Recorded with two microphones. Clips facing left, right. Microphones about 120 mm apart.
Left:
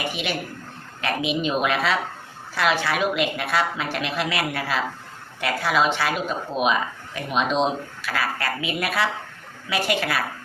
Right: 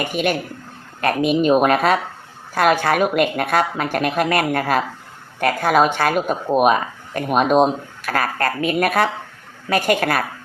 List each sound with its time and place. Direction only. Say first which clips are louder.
0.0 s speech: right 7 dB; 50° right (ahead or behind)